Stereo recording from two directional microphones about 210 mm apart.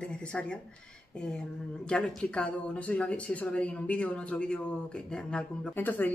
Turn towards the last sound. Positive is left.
turn(degrees=10)  # may be behind; listen again after turning